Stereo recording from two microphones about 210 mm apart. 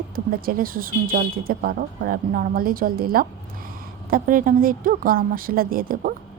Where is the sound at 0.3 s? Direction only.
45° right (ahead or behind).